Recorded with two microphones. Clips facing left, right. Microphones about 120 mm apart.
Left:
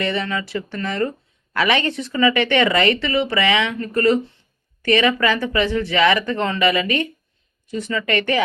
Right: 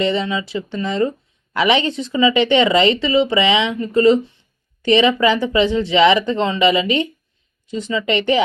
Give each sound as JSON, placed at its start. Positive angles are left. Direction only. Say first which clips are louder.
{"t": 0.0, "sound": "speech", "louder": "right 4 dB", "side_deg": -20}